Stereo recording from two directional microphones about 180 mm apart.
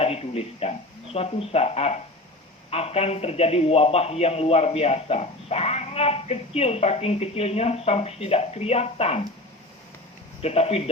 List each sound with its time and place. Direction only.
0.0 s a man's voice: 35° left (ahead or behind)
10.4 s a man's voice: 35° left (ahead or behind)